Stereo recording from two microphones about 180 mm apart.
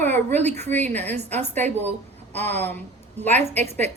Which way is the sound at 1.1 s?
40° right (ahead or behind).